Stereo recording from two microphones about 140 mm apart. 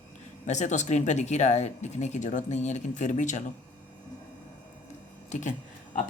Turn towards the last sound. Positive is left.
turn(degrees=60)  # may be behind; listen again after turning